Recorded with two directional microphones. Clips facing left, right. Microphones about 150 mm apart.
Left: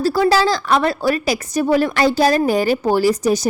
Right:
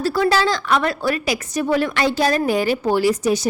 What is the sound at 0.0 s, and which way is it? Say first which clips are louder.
Speech: left 3 dB; 35° left (ahead or behind).